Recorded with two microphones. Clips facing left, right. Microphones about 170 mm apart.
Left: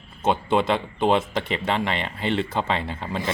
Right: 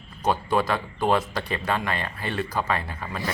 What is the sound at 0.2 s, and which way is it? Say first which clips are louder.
Speech: left 2 dB; 25° left (ahead or behind).